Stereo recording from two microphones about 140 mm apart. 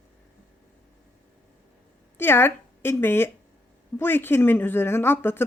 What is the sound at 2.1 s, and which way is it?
A woman's voice, 15° left (ahead or behind).